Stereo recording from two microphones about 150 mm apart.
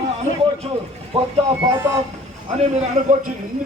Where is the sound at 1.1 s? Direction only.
40° right (ahead or behind).